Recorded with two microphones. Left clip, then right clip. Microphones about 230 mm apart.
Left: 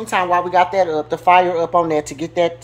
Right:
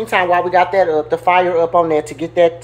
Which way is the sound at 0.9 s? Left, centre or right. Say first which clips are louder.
Even; left.